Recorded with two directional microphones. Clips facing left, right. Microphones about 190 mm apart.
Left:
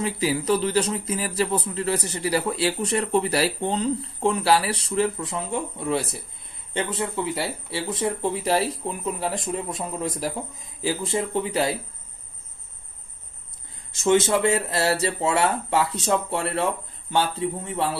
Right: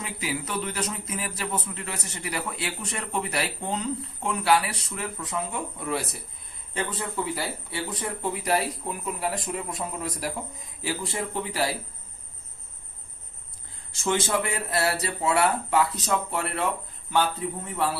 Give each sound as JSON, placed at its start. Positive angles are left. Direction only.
{"t": 0.0, "sound": "a man's voice", "side_deg": 35}
{"t": 14.0, "sound": "speech", "side_deg": 25}